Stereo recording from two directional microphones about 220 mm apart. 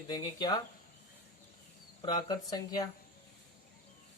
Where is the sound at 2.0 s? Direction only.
20° left (ahead or behind).